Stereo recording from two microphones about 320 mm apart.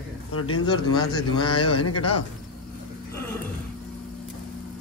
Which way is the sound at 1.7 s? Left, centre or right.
Left.